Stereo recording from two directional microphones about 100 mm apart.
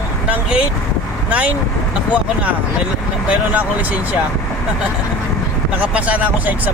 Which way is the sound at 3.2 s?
15° right (ahead or behind).